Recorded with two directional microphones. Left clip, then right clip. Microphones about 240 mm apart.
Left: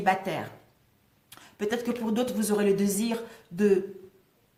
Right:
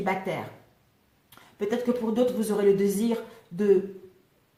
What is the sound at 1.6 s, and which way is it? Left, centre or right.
Speech, left.